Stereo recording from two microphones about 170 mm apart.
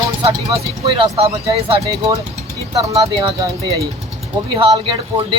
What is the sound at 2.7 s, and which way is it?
Speech, 20° right (ahead or behind).